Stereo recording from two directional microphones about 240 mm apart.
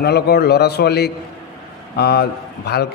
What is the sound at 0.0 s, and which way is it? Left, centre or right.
A man's voice, left.